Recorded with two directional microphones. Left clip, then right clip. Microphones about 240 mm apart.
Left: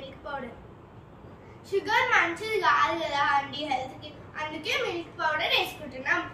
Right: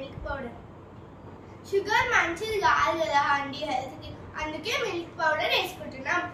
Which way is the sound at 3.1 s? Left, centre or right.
Centre.